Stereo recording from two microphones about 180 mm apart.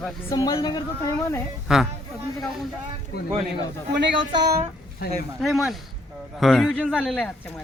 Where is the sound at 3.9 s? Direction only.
80° right.